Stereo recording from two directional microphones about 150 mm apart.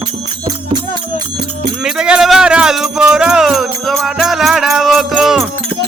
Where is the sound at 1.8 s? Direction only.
5° right (ahead or behind).